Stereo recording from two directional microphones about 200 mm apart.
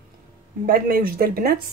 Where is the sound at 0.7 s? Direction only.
45° right (ahead or behind).